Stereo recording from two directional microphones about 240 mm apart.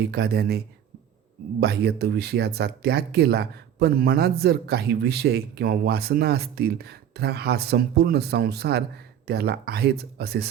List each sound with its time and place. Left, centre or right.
0.0 s speech: right
1.6 s speech: right